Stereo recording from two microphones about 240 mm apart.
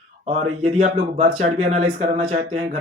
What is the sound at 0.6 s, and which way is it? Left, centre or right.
Speech, right.